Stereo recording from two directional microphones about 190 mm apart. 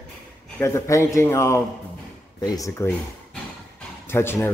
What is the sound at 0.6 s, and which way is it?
Speech, 15° left (ahead or behind).